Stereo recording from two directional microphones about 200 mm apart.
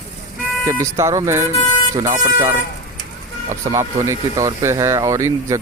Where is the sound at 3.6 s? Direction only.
15° right (ahead or behind).